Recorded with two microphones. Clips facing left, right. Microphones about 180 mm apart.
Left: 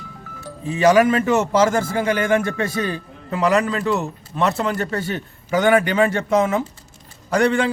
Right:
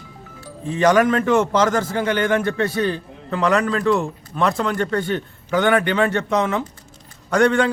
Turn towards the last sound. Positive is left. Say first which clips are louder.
# right 1 dB
turn(degrees=5)  # may be behind; listen again after turning